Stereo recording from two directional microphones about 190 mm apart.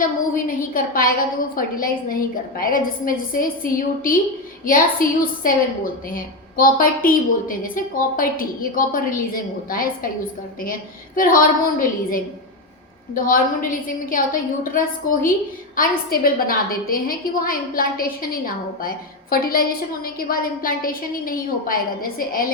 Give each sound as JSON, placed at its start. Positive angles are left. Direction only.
{"t": 0.0, "sound": "a woman's voice", "side_deg": 45}